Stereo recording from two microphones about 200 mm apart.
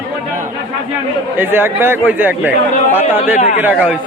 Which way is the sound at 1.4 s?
10° right (ahead or behind).